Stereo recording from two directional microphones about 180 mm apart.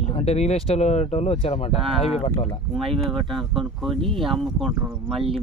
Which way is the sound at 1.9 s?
Centre (ahead or behind).